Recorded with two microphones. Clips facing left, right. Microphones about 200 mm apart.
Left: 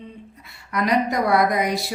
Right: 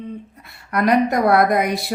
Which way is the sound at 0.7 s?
55° right (ahead or behind).